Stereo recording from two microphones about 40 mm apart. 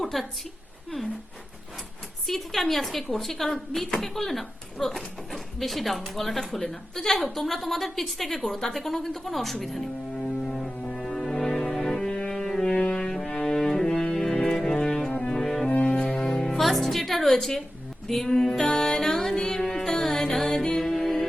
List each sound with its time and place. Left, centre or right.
0.0 s a sound: centre
2.2 s speech: centre
8.7 s music: centre